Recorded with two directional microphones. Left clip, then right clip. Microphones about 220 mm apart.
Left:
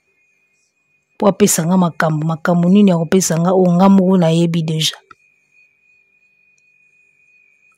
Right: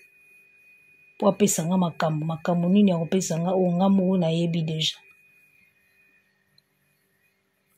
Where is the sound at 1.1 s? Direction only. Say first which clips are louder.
Left 8 dB; 50° left (ahead or behind).